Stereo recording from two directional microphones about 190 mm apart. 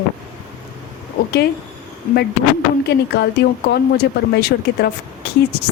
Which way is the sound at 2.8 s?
60° left (ahead or behind).